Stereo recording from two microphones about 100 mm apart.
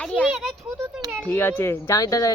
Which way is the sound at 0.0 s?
10° left (ahead or behind).